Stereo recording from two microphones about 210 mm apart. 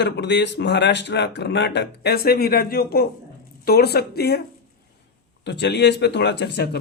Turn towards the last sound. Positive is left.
turn(degrees=50)  # may be behind; listen again after turning